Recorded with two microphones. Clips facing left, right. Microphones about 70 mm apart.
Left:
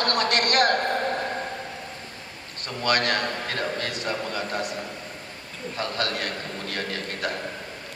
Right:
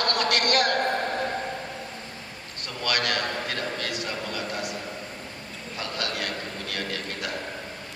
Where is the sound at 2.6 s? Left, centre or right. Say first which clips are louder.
Left 4 dB; left.